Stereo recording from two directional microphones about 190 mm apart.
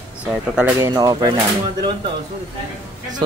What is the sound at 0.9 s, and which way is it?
Speech, 20° right (ahead or behind).